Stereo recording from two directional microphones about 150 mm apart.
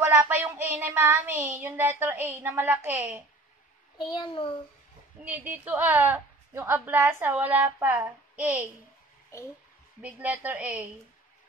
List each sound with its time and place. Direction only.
0.0 s a woman's voice: 15° right (ahead or behind)
4.0 s a child's voice: 30° left (ahead or behind)
5.2 s a woman's voice: 10° right (ahead or behind)
9.3 s a child's voice: 20° left (ahead or behind)
10.0 s a woman's voice: 10° right (ahead or behind)